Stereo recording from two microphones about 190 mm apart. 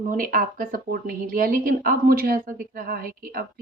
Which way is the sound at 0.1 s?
45° right (ahead or behind).